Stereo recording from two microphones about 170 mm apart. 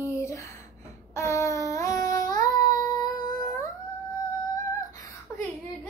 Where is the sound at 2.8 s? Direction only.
20° left (ahead or behind).